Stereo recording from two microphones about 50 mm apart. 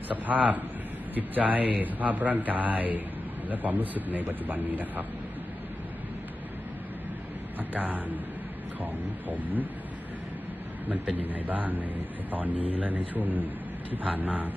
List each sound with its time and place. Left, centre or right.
0.1 s a man's voice: right
7.7 s a man's voice: right
9.3 s a man's voice: right
10.9 s a man's voice: right